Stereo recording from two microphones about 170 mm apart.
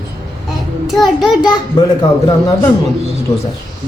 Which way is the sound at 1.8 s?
25° left (ahead or behind).